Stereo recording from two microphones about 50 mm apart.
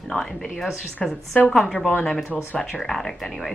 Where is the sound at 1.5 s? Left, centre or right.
Centre.